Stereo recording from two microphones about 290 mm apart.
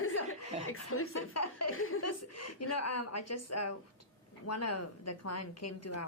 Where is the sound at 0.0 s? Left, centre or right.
Left.